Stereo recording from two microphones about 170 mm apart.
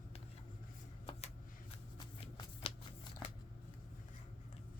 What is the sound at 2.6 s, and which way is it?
Crumpling, 30° left (ahead or behind).